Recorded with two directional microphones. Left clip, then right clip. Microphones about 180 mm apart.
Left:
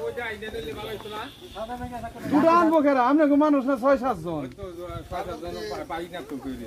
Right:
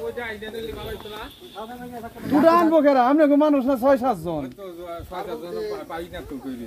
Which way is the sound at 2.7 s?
50° right (ahead or behind).